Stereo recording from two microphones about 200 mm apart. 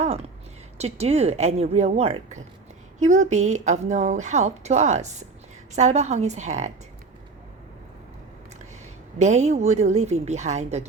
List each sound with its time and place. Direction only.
0.8 s a woman's voice: 30° right (ahead or behind)
9.1 s a woman's voice: 35° right (ahead or behind)